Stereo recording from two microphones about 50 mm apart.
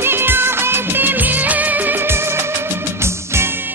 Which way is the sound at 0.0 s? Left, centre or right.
Right.